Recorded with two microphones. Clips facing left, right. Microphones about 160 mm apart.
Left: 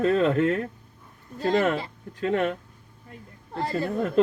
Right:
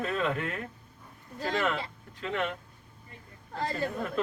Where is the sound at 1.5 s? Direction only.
50° left (ahead or behind).